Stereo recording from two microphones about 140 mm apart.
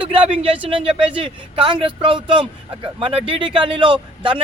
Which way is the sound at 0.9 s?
10° right (ahead or behind).